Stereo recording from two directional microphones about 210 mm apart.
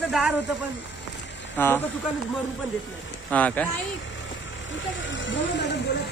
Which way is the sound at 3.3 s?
5° left (ahead or behind).